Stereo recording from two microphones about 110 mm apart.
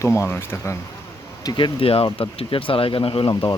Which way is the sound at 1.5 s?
45° left (ahead or behind).